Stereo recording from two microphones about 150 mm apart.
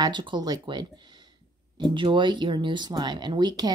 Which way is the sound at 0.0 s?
30° right (ahead or behind).